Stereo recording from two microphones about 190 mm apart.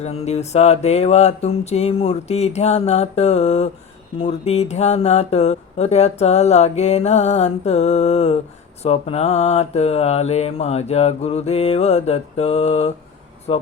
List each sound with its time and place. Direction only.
0.0 s speech: 35° left (ahead or behind)